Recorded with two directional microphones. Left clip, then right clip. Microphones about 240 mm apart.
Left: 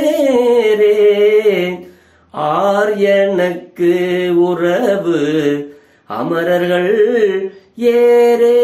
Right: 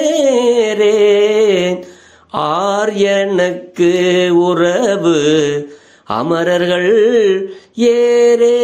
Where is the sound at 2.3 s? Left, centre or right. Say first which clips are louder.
Left 1 dB; right.